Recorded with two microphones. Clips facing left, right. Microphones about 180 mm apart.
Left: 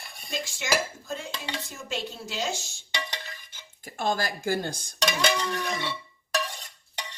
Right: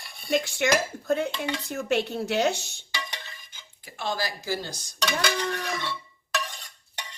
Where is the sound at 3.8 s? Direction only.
45° left (ahead or behind).